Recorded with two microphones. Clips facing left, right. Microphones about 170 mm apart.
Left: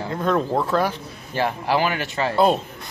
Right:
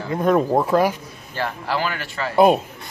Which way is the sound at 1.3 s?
15° left (ahead or behind).